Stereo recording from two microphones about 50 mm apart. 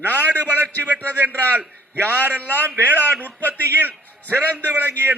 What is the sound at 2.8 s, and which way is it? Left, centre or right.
A man's voice, right.